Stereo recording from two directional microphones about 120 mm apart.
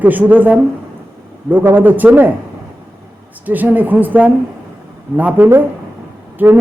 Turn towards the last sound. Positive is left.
turn(degrees=-15)  # may be behind; listen again after turning